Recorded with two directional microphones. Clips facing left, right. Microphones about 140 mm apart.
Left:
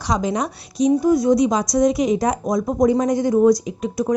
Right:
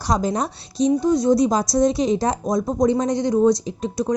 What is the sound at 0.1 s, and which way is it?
Speech, 35° right (ahead or behind).